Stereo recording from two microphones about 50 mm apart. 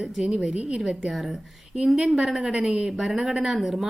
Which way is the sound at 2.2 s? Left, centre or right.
Centre.